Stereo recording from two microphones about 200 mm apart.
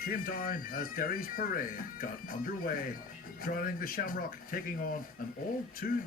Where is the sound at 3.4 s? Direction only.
45° left (ahead or behind).